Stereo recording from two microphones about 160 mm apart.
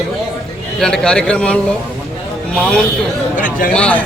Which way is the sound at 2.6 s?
5° left (ahead or behind).